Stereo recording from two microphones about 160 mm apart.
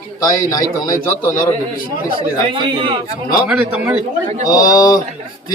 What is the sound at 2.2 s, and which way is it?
Speech, 30° right (ahead or behind).